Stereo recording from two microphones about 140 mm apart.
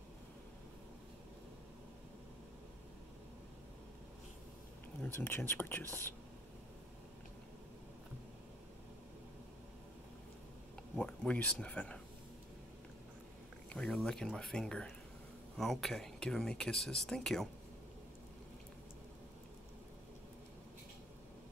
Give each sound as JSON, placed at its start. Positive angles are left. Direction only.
{"t": 5.0, "sound": "speech", "side_deg": 15}
{"t": 11.0, "sound": "speech", "side_deg": 10}
{"t": 13.7, "sound": "speech", "side_deg": 5}